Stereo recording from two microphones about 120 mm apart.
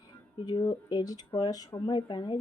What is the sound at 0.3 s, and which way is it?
A woman's voice, 40° left (ahead or behind).